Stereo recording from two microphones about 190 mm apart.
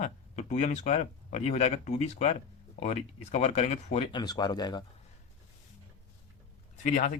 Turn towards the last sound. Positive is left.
turn(degrees=40)  # may be behind; listen again after turning